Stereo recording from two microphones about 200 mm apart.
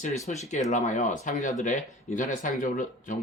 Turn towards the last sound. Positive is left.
turn(degrees=40)  # may be behind; listen again after turning